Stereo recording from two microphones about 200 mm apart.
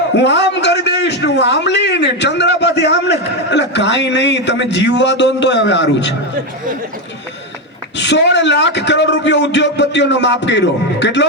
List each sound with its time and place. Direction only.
0.1 s a man's voice: 60° left (ahead or behind)
7.9 s a man's voice: 60° left (ahead or behind)